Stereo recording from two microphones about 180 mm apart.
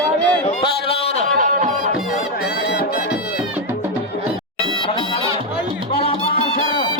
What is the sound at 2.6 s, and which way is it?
Music, 70° left (ahead or behind).